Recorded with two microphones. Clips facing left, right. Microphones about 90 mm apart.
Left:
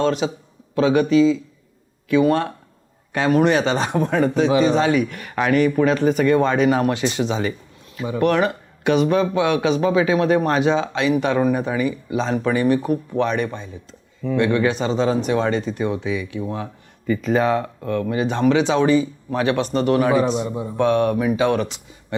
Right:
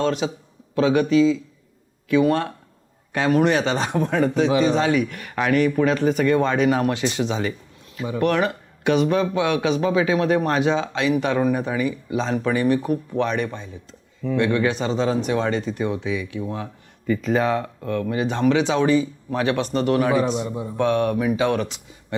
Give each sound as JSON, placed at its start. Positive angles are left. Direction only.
{"t": 0.0, "sound": "speech", "side_deg": 15}
{"t": 16.4, "sound": "speech", "side_deg": 30}
{"t": 20.8, "sound": "speech", "side_deg": 20}